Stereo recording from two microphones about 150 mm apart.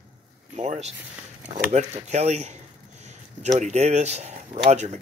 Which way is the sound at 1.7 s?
50° right (ahead or behind).